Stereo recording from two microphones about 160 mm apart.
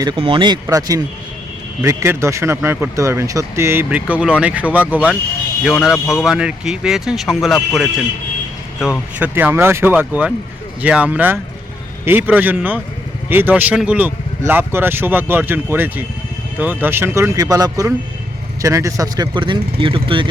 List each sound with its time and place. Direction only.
0.0 s a man's voice: 30° right (ahead or behind)